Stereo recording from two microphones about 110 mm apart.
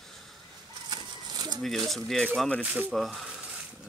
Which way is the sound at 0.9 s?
40° right (ahead or behind).